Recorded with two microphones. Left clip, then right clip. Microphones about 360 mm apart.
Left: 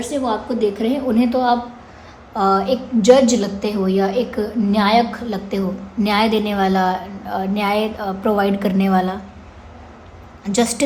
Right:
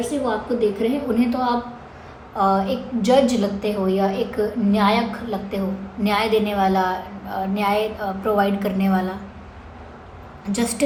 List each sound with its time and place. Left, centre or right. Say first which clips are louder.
0.3 s a woman's voice: left 2 dB; left
10.4 s a woman's voice: left 5 dB; left